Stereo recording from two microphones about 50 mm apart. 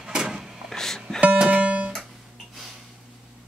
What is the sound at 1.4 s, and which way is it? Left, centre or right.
Music, right.